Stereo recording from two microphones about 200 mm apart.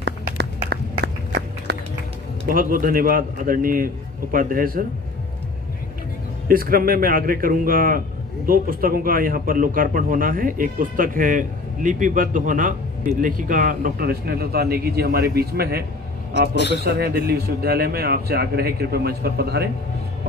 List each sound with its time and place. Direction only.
0.0 s a sound: 60° right (ahead or behind)
2.4 s a man's voice: 45° right (ahead or behind)
6.4 s a man's voice: 45° right (ahead or behind)
16.8 s a man's voice: 50° right (ahead or behind)